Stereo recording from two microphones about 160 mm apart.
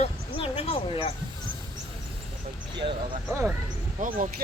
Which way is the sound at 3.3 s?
15° right (ahead or behind).